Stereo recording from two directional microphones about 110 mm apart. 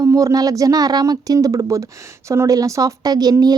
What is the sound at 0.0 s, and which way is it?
A woman's voice, 30° right (ahead or behind).